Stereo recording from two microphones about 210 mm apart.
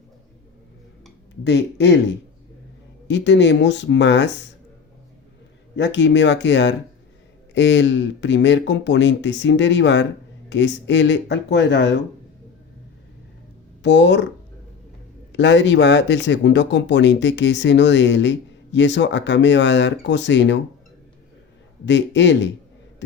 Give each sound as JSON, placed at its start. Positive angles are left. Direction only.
{"t": 1.5, "sound": "speech", "side_deg": 55}
{"t": 5.7, "sound": "speech", "side_deg": 60}
{"t": 13.8, "sound": "speech", "side_deg": 55}
{"t": 15.3, "sound": "speech", "side_deg": 60}
{"t": 21.8, "sound": "speech", "side_deg": 60}